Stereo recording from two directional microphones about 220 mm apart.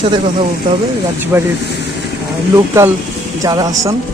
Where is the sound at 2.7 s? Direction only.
10° right (ahead or behind).